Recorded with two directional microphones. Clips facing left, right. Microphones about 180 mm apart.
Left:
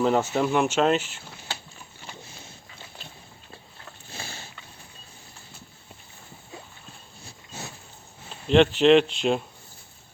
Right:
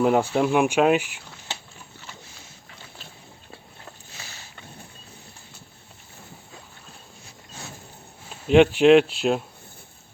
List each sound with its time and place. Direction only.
0.0 s speech: 10° right (ahead or behind)
4.1 s boat: 30° left (ahead or behind)
8.3 s speech: 10° right (ahead or behind)